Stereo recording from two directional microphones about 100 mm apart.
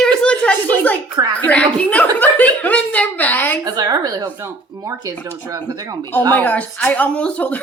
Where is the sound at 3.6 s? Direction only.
40° right (ahead or behind).